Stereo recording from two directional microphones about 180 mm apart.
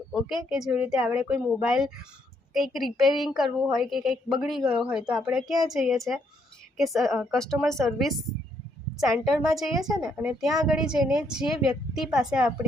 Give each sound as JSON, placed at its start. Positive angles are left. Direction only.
{"t": 0.1, "sound": "speech", "side_deg": 0}